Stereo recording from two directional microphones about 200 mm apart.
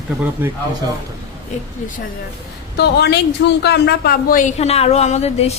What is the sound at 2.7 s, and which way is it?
Speech, 55° left (ahead or behind).